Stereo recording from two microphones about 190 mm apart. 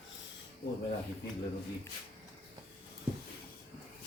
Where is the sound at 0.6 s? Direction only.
60° left (ahead or behind).